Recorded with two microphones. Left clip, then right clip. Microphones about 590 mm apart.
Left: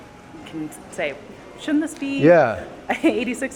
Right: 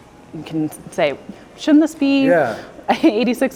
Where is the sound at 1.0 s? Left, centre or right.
Right.